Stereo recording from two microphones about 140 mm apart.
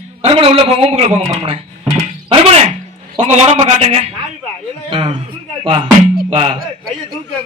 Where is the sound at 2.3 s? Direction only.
45° right (ahead or behind).